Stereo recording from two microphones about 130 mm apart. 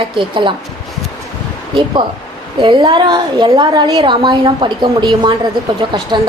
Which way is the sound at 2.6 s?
35° right (ahead or behind).